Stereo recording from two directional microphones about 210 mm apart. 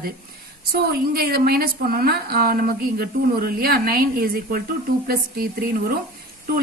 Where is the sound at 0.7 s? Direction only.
45° right (ahead or behind).